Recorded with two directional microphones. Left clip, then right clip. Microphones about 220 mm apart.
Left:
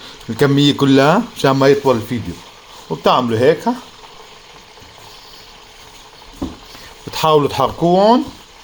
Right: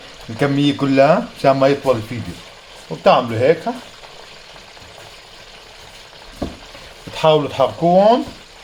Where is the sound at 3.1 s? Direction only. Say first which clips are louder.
Even; 35° left (ahead or behind).